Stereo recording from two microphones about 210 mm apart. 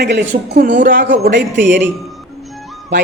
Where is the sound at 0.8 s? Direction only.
40° right (ahead or behind).